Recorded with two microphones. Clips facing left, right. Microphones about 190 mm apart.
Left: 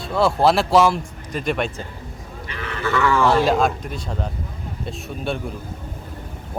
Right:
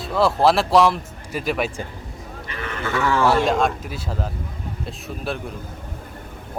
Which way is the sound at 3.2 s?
5° right (ahead or behind).